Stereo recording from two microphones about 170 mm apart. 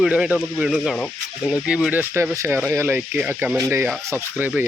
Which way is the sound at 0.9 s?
5° left (ahead or behind).